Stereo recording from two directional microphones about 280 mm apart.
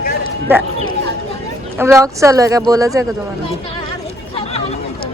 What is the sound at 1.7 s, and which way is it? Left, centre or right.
Speech, centre.